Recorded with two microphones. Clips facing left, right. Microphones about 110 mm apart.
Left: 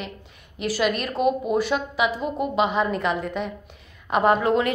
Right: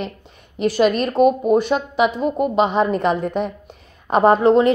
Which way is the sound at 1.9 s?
35° right (ahead or behind).